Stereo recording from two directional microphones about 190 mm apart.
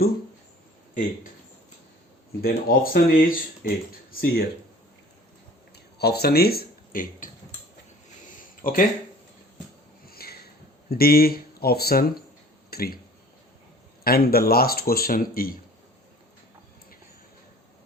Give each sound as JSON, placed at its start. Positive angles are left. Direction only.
{"t": 2.4, "sound": "speech", "side_deg": 50}
{"t": 5.7, "sound": "a sound", "side_deg": 60}
{"t": 8.6, "sound": "speech", "side_deg": 45}
{"t": 10.1, "sound": "a sound", "side_deg": 55}
{"t": 12.7, "sound": "speech", "side_deg": 50}
{"t": 14.0, "sound": "speech", "side_deg": 55}